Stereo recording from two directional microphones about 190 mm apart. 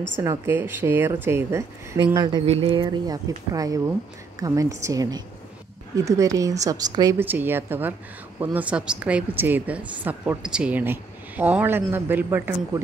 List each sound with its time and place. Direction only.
0.2 s a woman's voice: 15° right (ahead or behind)